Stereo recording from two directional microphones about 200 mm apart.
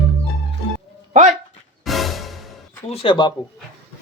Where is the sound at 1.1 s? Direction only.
35° right (ahead or behind).